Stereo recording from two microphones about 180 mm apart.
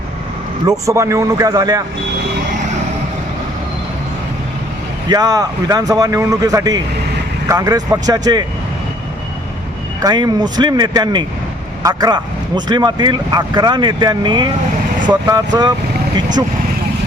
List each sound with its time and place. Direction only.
0.7 s a man's voice: 15° right (ahead or behind)
5.0 s speech: 20° right (ahead or behind)
10.0 s speech: 25° right (ahead or behind)